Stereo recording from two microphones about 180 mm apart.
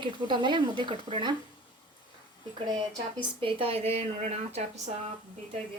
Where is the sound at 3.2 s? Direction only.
30° right (ahead or behind).